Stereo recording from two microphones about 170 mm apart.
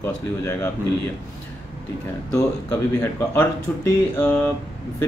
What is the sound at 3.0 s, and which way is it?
A man's voice, 10° left (ahead or behind).